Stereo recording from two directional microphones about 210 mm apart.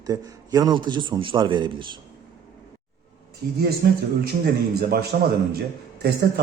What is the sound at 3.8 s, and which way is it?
Speech, 45° right (ahead or behind).